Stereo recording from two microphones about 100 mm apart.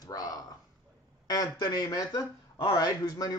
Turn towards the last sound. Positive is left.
turn(degrees=40)  # may be behind; listen again after turning